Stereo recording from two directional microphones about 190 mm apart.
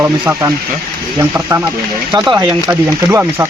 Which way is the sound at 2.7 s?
15° right (ahead or behind).